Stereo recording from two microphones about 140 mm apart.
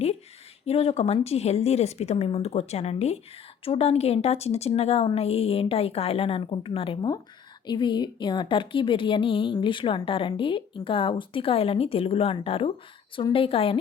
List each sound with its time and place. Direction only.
0.6 s a woman's voice: 45° left (ahead or behind)